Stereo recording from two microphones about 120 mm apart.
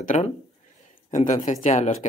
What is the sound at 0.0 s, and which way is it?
Speech, 90° left.